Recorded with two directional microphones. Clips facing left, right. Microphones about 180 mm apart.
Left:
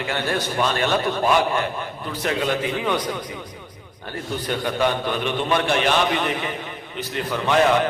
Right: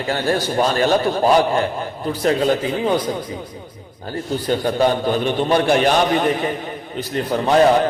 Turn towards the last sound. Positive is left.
turn(degrees=-35)  # may be behind; listen again after turning